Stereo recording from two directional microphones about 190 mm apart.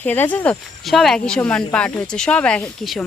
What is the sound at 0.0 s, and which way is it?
Speech, 10° left (ahead or behind).